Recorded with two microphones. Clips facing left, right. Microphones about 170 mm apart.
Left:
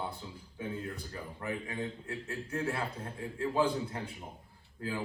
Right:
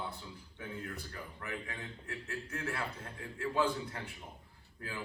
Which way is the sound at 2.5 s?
25° left (ahead or behind).